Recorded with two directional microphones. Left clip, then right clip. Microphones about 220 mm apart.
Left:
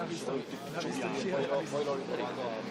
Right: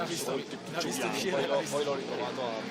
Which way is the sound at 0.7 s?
30° right (ahead or behind).